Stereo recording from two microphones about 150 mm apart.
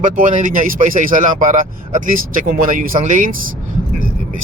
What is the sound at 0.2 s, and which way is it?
Speech, 60° right (ahead or behind).